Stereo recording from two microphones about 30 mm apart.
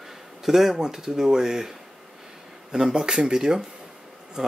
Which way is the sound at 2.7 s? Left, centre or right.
Right.